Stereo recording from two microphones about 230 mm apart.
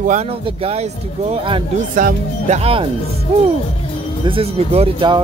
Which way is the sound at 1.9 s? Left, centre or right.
Right.